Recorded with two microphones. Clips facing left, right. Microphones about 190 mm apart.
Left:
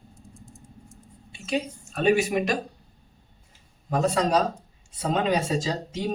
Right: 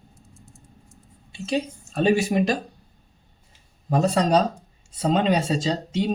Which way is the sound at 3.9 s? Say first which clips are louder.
Right 3 dB; 35° right (ahead or behind).